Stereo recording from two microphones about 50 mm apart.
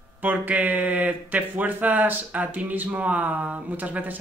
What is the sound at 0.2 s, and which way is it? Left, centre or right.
Speech, right.